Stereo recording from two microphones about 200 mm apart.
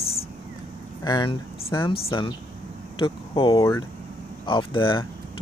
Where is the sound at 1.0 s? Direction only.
20° left (ahead or behind).